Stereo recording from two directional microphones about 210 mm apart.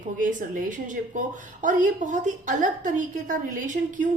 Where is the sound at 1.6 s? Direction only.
40° right (ahead or behind).